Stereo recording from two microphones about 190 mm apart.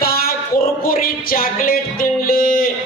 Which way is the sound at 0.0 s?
50° left (ahead or behind).